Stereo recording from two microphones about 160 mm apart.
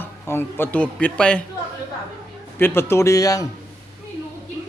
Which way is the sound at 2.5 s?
15° left (ahead or behind).